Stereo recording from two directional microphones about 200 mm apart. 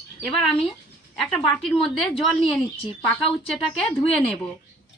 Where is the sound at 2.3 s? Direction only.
30° left (ahead or behind).